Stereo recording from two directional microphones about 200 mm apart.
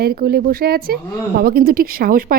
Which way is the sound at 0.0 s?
50° right (ahead or behind).